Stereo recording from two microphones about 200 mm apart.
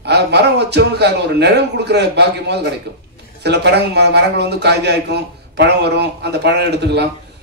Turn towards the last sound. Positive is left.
turn(degrees=-55)  # may be behind; listen again after turning